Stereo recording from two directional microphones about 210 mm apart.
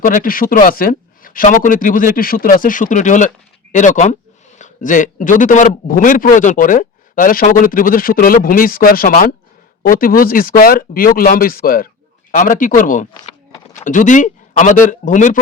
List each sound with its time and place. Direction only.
0.0 s speech: 40° left (ahead or behind)